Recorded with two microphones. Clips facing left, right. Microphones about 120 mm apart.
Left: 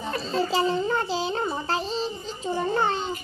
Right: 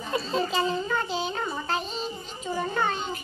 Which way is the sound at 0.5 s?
35° left (ahead or behind).